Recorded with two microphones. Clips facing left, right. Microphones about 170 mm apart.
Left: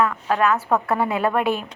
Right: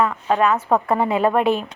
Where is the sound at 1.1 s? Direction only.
Centre (ahead or behind).